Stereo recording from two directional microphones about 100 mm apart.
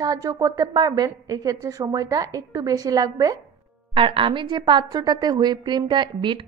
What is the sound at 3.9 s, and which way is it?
A woman's voice, 60° right (ahead or behind).